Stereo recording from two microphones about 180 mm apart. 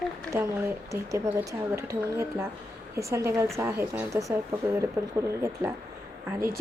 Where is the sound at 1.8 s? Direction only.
15° right (ahead or behind).